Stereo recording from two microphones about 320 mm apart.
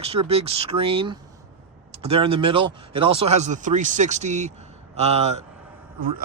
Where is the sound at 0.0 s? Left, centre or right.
Centre.